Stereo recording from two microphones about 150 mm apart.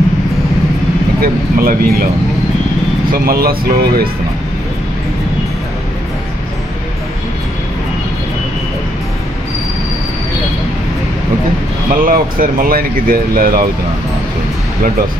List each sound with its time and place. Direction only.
1.2 s speech: 80° right
3.1 s speech: 85° right
11.9 s speech: 65° right (ahead or behind)